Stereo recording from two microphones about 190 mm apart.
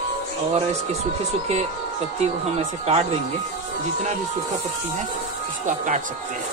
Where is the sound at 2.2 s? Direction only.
35° right (ahead or behind).